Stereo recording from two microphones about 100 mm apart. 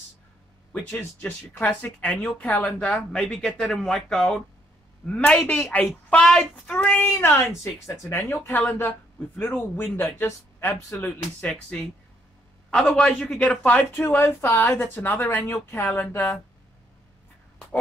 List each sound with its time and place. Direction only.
0.7 s speech: 15° left (ahead or behind)
10.1 s speech: 25° left (ahead or behind)
11.1 s speech: 10° left (ahead or behind)